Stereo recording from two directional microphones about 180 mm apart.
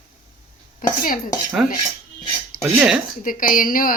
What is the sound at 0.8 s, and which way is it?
Cutlery, 50° left (ahead or behind).